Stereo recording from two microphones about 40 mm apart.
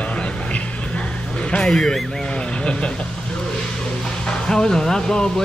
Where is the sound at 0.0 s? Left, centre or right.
Left.